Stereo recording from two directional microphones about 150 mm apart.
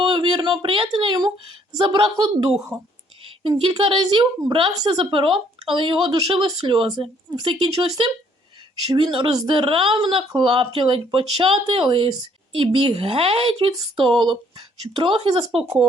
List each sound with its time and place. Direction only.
0.0 s a sound: 30° right (ahead or behind)
1.7 s a woman's voice: 30° right (ahead or behind)
3.6 s speech: 35° right (ahead or behind)
9.1 s speech: 35° right (ahead or behind)